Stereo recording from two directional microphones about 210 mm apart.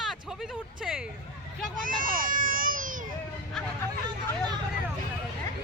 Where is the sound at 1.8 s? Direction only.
40° right (ahead or behind).